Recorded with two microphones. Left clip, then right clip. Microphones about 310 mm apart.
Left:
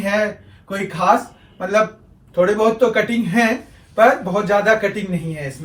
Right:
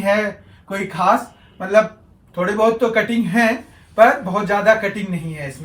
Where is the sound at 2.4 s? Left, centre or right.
Centre.